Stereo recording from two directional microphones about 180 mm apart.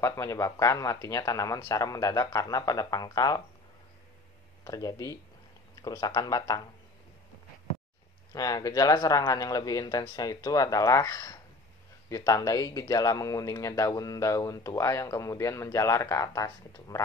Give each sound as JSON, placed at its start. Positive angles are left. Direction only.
{"t": 0.0, "sound": "speech", "side_deg": 15}
{"t": 4.6, "sound": "speech", "side_deg": 20}
{"t": 8.3, "sound": "speech", "side_deg": 20}